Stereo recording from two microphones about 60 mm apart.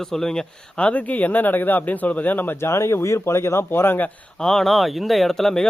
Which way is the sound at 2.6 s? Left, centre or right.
Left.